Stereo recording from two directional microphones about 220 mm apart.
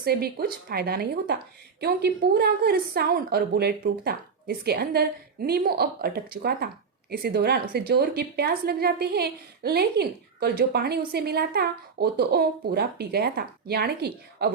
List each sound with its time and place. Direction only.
0.0 s a woman's voice: 45° right (ahead or behind)